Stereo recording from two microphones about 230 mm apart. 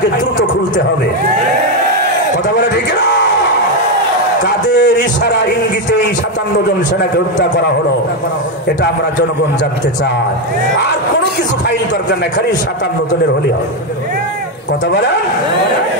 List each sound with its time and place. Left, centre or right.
4.6 s a man's voice: left